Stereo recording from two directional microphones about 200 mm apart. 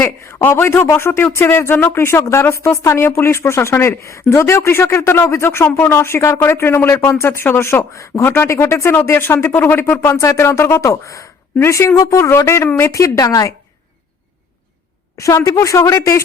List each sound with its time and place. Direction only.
0.0 s speech: 10° left (ahead or behind)
15.2 s speech: 15° left (ahead or behind)